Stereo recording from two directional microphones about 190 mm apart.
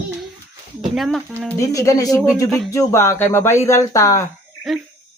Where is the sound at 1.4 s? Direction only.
15° left (ahead or behind).